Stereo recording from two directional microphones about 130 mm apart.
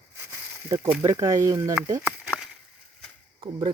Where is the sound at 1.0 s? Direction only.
25° right (ahead or behind).